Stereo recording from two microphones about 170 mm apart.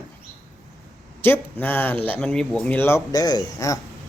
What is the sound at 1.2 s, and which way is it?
Speech, 10° left (ahead or behind).